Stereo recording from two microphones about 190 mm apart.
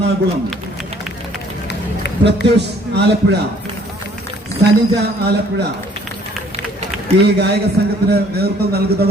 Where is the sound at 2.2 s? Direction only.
60° right (ahead or behind).